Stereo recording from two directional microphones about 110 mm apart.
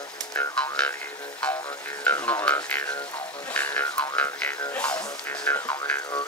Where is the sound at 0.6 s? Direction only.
10° left (ahead or behind).